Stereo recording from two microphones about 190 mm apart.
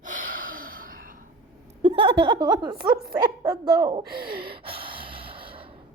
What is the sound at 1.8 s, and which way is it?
A woman's voice, 25° right (ahead or behind).